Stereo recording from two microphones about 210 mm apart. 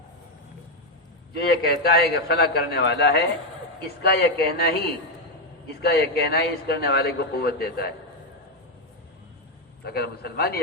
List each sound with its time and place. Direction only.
1.3 s a man's voice: 50° left (ahead or behind)
5.8 s a man's voice: 50° left (ahead or behind)
9.8 s a man's voice: 50° left (ahead or behind)